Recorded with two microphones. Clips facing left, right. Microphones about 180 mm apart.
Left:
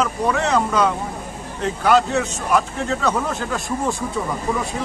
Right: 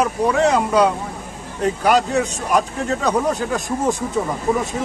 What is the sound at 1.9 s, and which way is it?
Speech, 40° right (ahead or behind).